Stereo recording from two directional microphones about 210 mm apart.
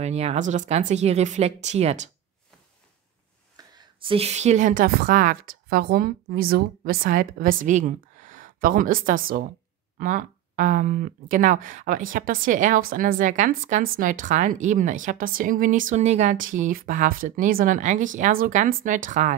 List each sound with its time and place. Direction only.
0.0 s a woman's voice: 30° right (ahead or behind)
3.5 s a woman's voice: 20° right (ahead or behind); by 19.3 s 35° right (ahead or behind)